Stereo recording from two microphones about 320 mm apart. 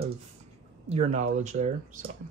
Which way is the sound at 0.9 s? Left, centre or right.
Centre.